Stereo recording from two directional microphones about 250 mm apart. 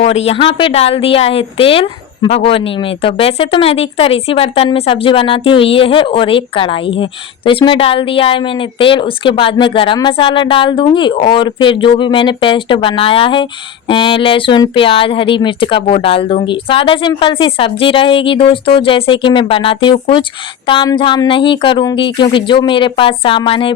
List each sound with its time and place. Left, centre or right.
0.0 s a woman's voice: left